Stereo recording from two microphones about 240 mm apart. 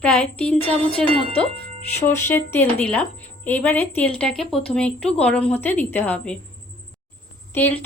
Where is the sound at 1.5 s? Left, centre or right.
Left.